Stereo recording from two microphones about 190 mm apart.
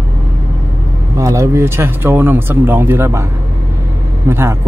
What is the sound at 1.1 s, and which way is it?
Speech, 15° right (ahead or behind).